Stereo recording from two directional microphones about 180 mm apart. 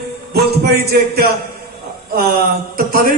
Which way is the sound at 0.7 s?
60° right (ahead or behind).